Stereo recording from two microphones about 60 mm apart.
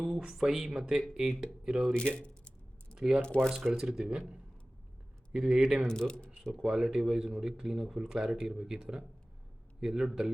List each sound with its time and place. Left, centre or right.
0.0 s speech: centre
1.9 s speech: centre
2.9 s a sound: centre
3.2 s speech: centre
3.5 s speech: centre
5.9 s speech: centre
6.4 s speech: centre